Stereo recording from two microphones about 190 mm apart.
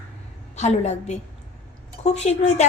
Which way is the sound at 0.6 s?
35° left (ahead or behind).